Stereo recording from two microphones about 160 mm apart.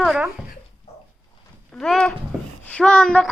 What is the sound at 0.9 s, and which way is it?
Dog, 40° left (ahead or behind).